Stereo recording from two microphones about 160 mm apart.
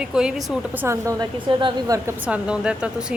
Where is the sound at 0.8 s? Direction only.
20° right (ahead or behind).